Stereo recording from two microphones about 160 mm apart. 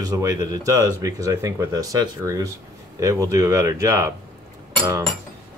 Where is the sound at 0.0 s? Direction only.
20° right (ahead or behind).